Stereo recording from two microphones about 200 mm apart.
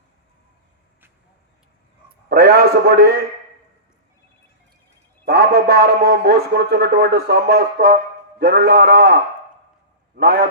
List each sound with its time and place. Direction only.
2.3 s a man's voice: 50° right (ahead or behind)
5.2 s a man's voice: 50° right (ahead or behind)
10.2 s a man's voice: 55° right (ahead or behind)